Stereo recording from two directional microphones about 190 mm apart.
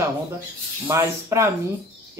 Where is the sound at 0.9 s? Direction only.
15° right (ahead or behind).